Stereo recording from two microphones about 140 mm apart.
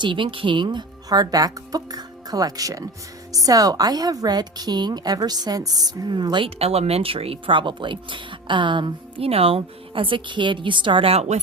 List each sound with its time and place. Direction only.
0.0 s a woman's voice: 35° right (ahead or behind)